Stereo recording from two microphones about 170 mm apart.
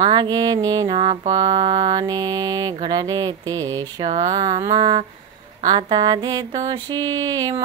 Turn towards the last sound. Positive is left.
turn(degrees=-20)  # may be behind; listen again after turning